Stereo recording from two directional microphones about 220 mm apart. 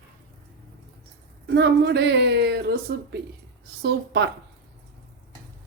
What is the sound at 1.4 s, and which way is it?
Speech, 50° right (ahead or behind).